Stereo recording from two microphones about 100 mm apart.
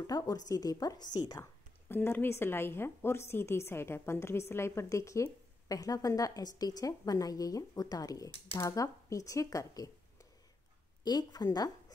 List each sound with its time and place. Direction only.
0.0 s a woman's voice: 40° left (ahead or behind)
1.9 s a woman's voice: 20° left (ahead or behind)
11.1 s a woman's voice: 45° left (ahead or behind)